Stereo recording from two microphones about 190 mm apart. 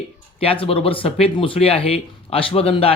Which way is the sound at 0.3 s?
30° left (ahead or behind).